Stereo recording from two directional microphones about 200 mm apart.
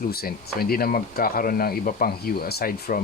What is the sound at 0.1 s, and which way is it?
Speech, 50° left (ahead or behind).